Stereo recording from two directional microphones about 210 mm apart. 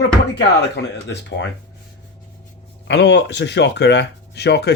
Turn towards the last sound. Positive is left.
turn(degrees=55)  # may be behind; listen again after turning